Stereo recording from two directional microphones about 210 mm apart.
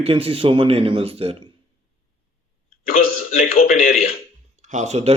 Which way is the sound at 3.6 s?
35° left (ahead or behind).